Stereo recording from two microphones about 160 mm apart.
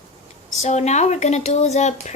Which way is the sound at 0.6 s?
45° left (ahead or behind).